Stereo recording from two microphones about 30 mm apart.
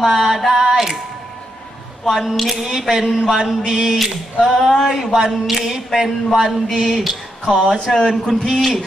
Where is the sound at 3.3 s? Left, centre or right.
Right.